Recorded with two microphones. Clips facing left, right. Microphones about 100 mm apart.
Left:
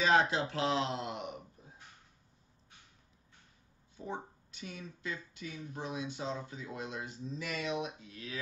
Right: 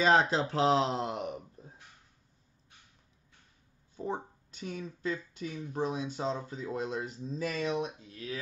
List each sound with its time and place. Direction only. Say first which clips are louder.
0.0 s speech: right 3 dB; 30° right (ahead or behind)
3.9 s speech: right 5 dB; 40° right (ahead or behind)